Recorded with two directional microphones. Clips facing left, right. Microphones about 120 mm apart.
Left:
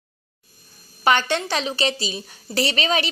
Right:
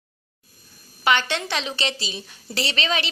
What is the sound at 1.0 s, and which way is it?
A woman's voice, 40° left (ahead or behind).